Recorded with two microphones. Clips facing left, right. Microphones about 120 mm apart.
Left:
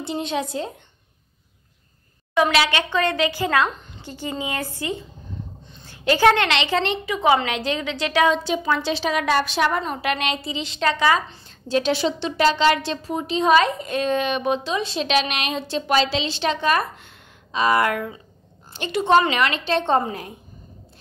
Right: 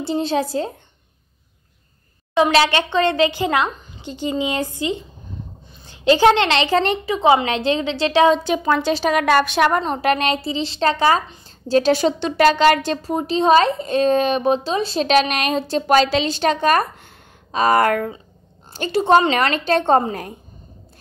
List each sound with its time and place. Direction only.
0.0 s a woman's voice: 35° right (ahead or behind)
2.3 s a woman's voice: 30° right (ahead or behind)
6.6 s a woman's voice: 40° right (ahead or behind)
7.4 s a woman's voice: 30° right (ahead or behind)
8.5 s a woman's voice: 50° right (ahead or behind)
9.8 s a woman's voice: 40° right (ahead or behind)